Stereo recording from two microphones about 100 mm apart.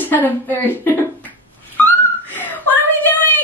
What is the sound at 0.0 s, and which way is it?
Speech, 20° left (ahead or behind).